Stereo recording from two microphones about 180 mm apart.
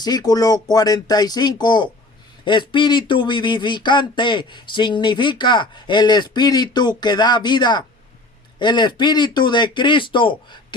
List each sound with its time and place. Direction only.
0.0 s speech: 20° left (ahead or behind)